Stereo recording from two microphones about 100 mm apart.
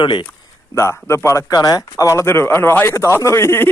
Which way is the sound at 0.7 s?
25° left (ahead or behind).